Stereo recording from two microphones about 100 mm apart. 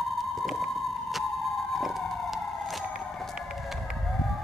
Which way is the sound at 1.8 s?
Centre (ahead or behind).